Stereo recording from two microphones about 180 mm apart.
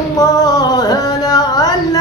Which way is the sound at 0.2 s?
20° left (ahead or behind).